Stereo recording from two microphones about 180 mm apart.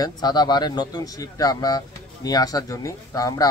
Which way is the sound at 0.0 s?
20° left (ahead or behind).